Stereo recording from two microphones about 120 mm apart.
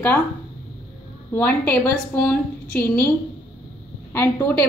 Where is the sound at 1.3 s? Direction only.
15° left (ahead or behind).